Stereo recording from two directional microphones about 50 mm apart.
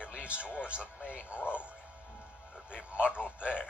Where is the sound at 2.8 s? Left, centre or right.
Right.